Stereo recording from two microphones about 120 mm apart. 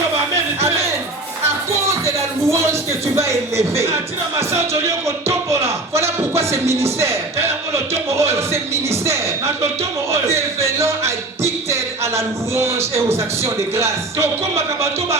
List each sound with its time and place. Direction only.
2.0 s a sound: 25° right (ahead or behind)
3.2 s speech: 25° right (ahead or behind)
4.4 s music: 25° right (ahead or behind)
8.2 s speech: 25° right (ahead or behind)
8.9 s a sound: 25° right (ahead or behind)
10.1 s music: 25° right (ahead or behind)
13.1 s speech: 25° right (ahead or behind)